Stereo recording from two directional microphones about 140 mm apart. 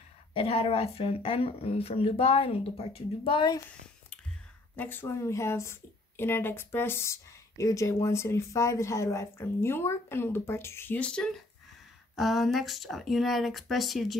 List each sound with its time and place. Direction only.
0.3 s speech: 40° left (ahead or behind)
4.7 s a woman's voice: 15° left (ahead or behind)